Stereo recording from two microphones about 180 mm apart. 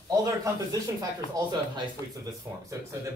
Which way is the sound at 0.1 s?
20° right (ahead or behind).